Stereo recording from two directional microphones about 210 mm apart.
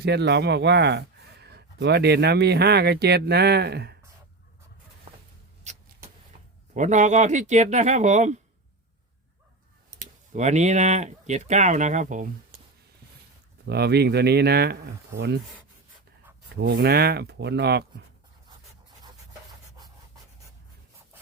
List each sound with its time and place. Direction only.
0.0 s speech: 55° right (ahead or behind)
6.7 s speech: 35° right (ahead or behind)
10.0 s speech: 35° right (ahead or behind)
13.7 s speech: 50° right (ahead or behind)
16.6 s speech: 55° right (ahead or behind)